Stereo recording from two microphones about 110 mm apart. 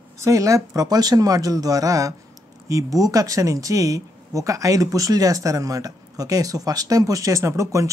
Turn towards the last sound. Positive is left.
turn(degrees=-30)  # may be behind; listen again after turning